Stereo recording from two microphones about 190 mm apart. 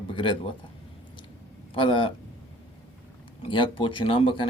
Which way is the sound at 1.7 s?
25° left (ahead or behind).